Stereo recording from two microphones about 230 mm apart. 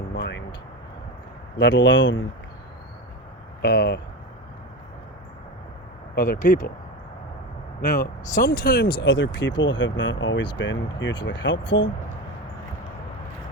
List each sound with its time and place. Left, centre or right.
0.1 s vehicle: left
1.5 s speech: left
3.6 s speech: left
6.1 s speech: left
7.9 s speech: left
9.0 s speech: left